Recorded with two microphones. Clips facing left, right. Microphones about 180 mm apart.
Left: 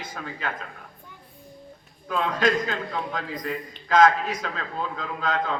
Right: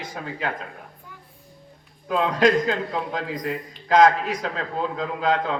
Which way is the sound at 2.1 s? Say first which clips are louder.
Right 4 dB; 30° right (ahead or behind).